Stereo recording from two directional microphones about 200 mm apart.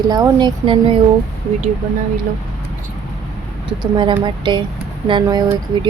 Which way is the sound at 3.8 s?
25° right (ahead or behind).